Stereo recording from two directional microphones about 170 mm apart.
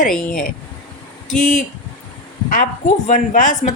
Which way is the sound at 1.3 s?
50° left (ahead or behind).